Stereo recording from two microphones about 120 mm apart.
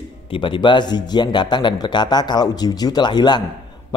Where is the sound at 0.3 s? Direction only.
45° left (ahead or behind).